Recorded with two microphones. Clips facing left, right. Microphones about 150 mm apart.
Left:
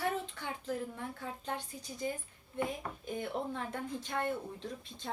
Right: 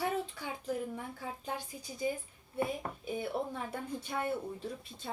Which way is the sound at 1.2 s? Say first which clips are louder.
Left 1 dB; 10° right (ahead or behind).